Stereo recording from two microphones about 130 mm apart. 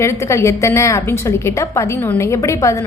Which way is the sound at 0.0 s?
20° left (ahead or behind).